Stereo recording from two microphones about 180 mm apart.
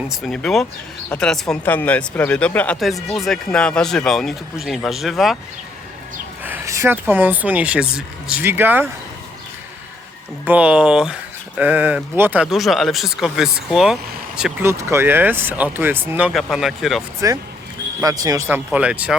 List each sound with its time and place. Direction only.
0.2 s speech: centre (ahead or behind)
6.4 s speech: 15° right (ahead or behind)
10.4 s speech: 10° right (ahead or behind)
14.7 s speech: 15° right (ahead or behind)
17.2 s speech: 20° right (ahead or behind)
18.4 s speech: 5° right (ahead or behind)